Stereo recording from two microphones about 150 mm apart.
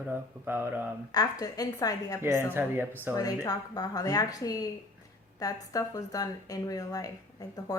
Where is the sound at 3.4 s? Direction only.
25° left (ahead or behind).